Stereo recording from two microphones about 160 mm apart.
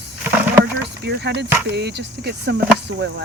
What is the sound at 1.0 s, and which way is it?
Speech, 90° right.